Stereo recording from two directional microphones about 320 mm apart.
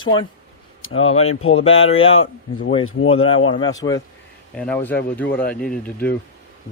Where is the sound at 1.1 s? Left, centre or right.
Centre.